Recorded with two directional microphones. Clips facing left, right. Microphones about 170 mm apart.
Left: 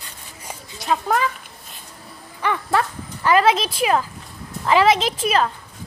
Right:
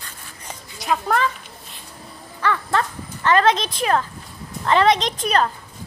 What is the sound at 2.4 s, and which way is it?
A woman's voice, 15° left (ahead or behind).